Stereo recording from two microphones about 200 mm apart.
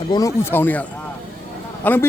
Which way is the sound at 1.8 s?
10° left (ahead or behind).